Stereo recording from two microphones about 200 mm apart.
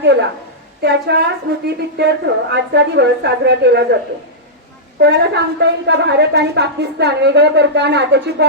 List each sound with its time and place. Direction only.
0.0 s a woman's voice: 60° right (ahead or behind)
4.9 s a woman's voice: 55° right (ahead or behind)